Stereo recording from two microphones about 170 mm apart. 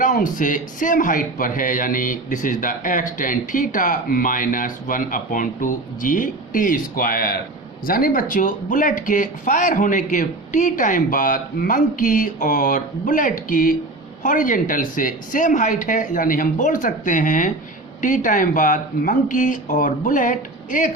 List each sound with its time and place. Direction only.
0.0 s a man's voice: 50° left (ahead or behind)